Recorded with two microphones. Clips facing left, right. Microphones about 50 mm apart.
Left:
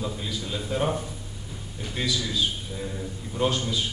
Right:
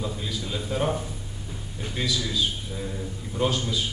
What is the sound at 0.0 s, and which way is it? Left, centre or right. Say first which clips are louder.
A man's voice: even; centre.